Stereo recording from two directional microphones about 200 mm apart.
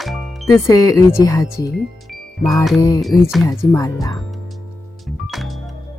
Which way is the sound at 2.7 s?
15° left (ahead or behind).